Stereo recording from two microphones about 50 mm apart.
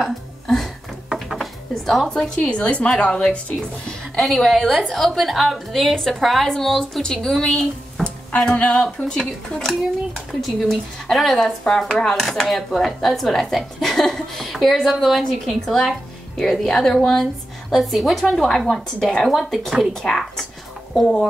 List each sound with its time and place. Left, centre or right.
0.0 s music: centre
1.0 s a sound: centre
1.4 s dishes: centre
2.0 s a woman's voice: centre
4.2 s speech: centre
5.7 s a woman's voice: centre
10.4 s a woman's voice: centre
19.9 s a woman's voice: centre